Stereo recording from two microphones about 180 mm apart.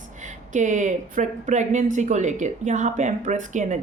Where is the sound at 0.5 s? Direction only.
45° right (ahead or behind).